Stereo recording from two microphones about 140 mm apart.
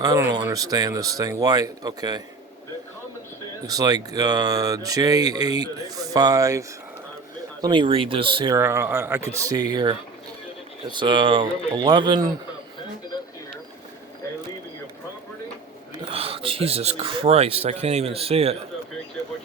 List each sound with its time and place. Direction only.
0.2 s speech: 20° right (ahead or behind)
3.7 s speech: 25° right (ahead or behind)
7.6 s speech: 35° right (ahead or behind)
8.5 s speech: 15° right (ahead or behind); by 12.3 s 35° right (ahead or behind)
16.0 s speech: 40° right (ahead or behind)